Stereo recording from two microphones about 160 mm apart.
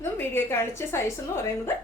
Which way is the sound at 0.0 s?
15° left (ahead or behind).